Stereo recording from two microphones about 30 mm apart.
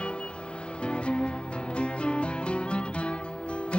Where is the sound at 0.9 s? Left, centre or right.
Left.